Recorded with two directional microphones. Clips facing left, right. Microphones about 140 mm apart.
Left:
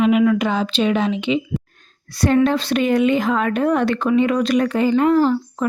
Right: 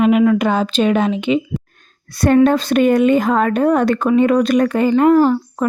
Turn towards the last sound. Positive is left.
turn(degrees=-45)  # may be behind; listen again after turning